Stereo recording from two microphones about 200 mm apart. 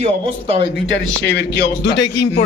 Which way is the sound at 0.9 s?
60° left (ahead or behind).